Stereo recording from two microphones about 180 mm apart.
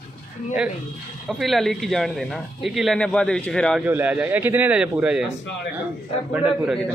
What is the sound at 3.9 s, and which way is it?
Speech, 10° right (ahead or behind).